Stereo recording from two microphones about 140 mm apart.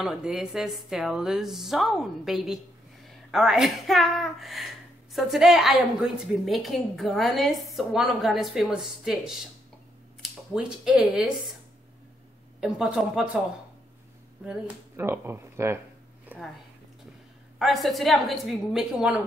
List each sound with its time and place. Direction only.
0.0 s a woman's voice: 5° right (ahead or behind)
12.5 s a woman's voice: 5° right (ahead or behind)
15.0 s speech: 15° right (ahead or behind)
16.3 s a sound: 15° right (ahead or behind)
17.6 s a woman's voice: centre (ahead or behind)